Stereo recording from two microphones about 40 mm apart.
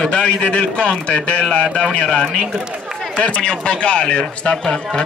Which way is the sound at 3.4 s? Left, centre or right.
Left.